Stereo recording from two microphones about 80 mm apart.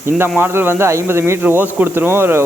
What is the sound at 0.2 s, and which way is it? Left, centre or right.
Speech, right.